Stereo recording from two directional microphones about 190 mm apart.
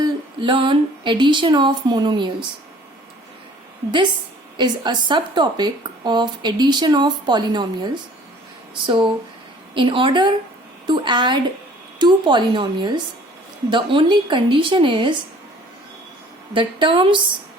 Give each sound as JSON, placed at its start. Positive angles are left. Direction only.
{"t": 0.0, "sound": "a sound", "side_deg": -25}
{"t": 4.5, "sound": "speech", "side_deg": -25}
{"t": 8.8, "sound": "speech", "side_deg": -25}
{"t": 16.6, "sound": "speech", "side_deg": -25}